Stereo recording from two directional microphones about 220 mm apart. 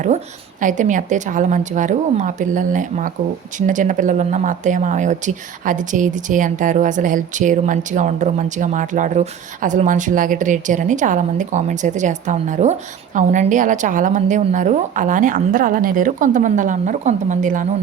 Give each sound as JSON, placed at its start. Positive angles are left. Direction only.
{"t": 0.6, "sound": "speech", "side_deg": -35}